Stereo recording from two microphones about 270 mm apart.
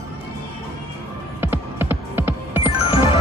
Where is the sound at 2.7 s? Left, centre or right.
Centre.